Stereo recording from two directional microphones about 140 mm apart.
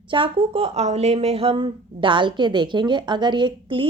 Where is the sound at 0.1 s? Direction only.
40° right (ahead or behind).